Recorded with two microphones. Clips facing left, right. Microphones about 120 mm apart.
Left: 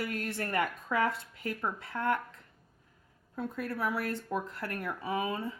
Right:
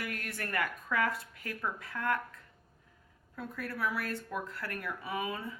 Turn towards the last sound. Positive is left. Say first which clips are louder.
# left 4 dB
turn(degrees=30)  # may be behind; listen again after turning